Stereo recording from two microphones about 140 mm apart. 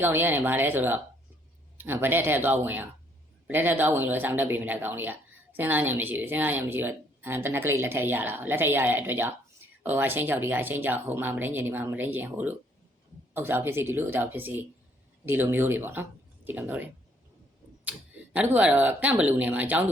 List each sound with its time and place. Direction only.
0.0 s speech: 15° right (ahead or behind)
18.3 s speech: 10° right (ahead or behind)